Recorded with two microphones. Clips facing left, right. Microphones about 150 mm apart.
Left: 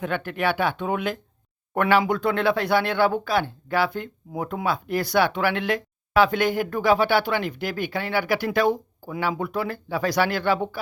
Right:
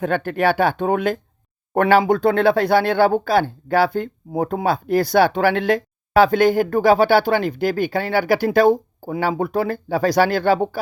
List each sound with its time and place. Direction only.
0.0 s speech: 40° right (ahead or behind)